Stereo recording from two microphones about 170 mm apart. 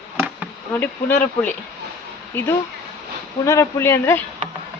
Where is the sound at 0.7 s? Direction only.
10° left (ahead or behind).